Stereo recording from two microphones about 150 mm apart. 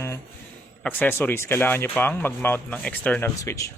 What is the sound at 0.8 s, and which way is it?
Speech, 15° left (ahead or behind).